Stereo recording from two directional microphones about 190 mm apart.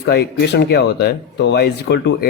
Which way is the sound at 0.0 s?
60° left (ahead or behind).